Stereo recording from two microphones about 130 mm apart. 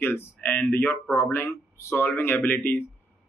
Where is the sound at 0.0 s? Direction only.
15° left (ahead or behind).